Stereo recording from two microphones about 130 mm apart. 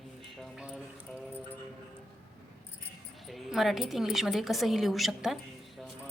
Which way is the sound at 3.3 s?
Centre (ahead or behind).